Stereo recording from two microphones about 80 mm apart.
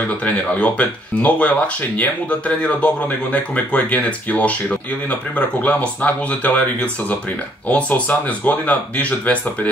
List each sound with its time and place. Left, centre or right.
0.2 s speech: centre